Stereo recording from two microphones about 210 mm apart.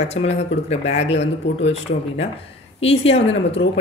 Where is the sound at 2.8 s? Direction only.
30° left (ahead or behind).